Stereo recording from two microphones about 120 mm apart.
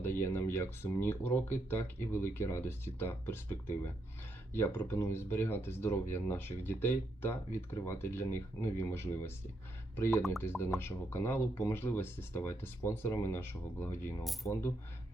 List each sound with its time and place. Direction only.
0.0 s speech: 20° left (ahead or behind)